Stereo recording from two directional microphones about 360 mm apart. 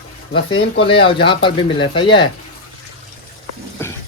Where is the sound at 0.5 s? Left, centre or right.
Centre.